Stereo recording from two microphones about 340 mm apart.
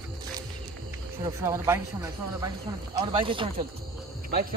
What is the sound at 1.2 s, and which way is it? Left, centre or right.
Speech, centre.